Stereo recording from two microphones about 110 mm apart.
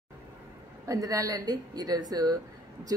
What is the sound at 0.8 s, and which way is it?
Speech, 30° right (ahead or behind).